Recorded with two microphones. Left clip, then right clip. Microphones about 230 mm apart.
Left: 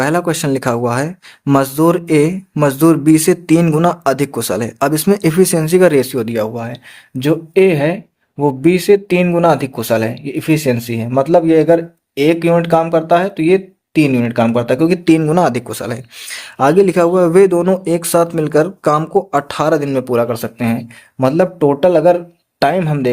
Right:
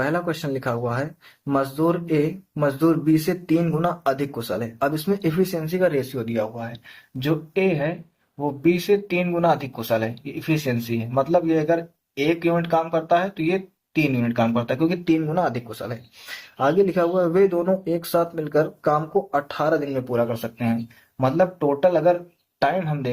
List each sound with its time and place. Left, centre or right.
0.0 s speech: left